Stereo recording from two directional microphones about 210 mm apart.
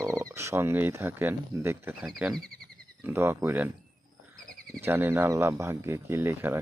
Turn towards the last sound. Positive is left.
turn(degrees=-10)  # may be behind; listen again after turning